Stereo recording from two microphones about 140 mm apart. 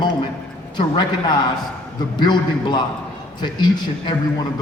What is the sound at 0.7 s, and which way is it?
A man's voice, 30° left (ahead or behind).